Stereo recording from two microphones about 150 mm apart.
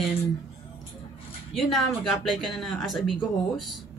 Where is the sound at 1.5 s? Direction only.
Centre (ahead or behind).